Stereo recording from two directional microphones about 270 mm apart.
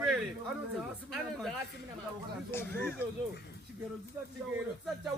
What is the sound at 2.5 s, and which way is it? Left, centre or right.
Speech, centre.